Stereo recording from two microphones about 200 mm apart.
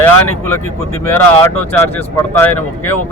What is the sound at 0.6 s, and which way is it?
Speech, 10° left (ahead or behind).